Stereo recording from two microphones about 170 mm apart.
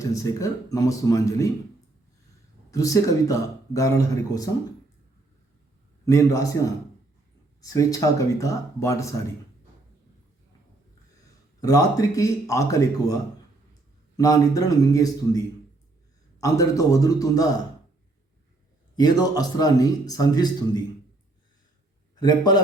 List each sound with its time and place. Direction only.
0.0 s speech: 20° left (ahead or behind)
2.6 s speech: 20° left (ahead or behind)
6.1 s speech: 20° left (ahead or behind)
7.6 s speech: 20° left (ahead or behind)
11.6 s speech: 20° left (ahead or behind)
14.2 s speech: 20° left (ahead or behind)
16.4 s speech: 20° left (ahead or behind)
18.9 s speech: 25° left (ahead or behind)
22.1 s a man's voice: 25° left (ahead or behind)